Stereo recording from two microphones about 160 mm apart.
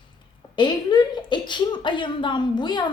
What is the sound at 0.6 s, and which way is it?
A woman's voice, 30° left (ahead or behind).